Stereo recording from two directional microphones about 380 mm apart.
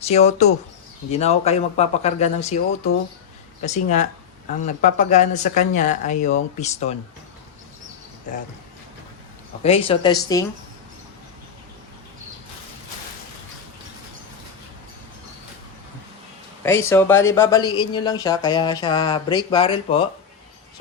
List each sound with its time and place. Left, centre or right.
0.0 s speech: centre
3.8 s speech: centre
9.6 s speech: centre
16.6 s speech: centre